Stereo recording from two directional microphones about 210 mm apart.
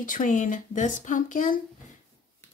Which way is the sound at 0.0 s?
40° left (ahead or behind).